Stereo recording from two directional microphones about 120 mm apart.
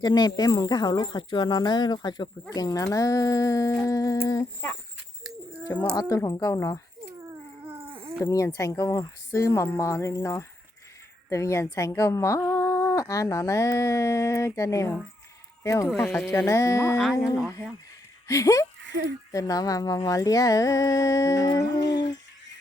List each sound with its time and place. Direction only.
0.0 s speech: 35° left (ahead or behind)
5.8 s speech: 35° left (ahead or behind)
7.3 s dog: 20° right (ahead or behind)
7.9 s a sound: 45° right (ahead or behind)
8.2 s speech: 25° left (ahead or behind)